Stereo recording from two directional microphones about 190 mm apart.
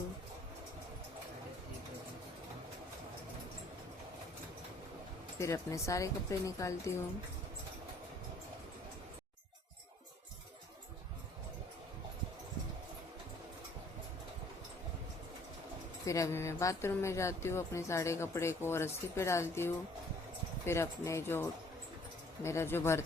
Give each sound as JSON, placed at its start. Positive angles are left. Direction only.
{"t": 5.4, "sound": "speech", "side_deg": 15}
{"t": 16.0, "sound": "speech", "side_deg": 15}